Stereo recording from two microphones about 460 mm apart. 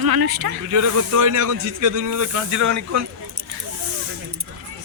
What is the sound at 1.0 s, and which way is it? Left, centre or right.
Speech, right.